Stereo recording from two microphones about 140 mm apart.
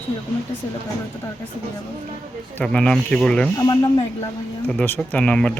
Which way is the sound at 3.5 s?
30° left (ahead or behind).